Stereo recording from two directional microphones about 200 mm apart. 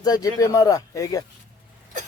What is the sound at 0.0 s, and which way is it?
Speech, 20° left (ahead or behind).